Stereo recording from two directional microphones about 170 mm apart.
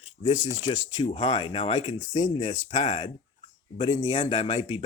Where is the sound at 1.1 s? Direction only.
35° left (ahead or behind).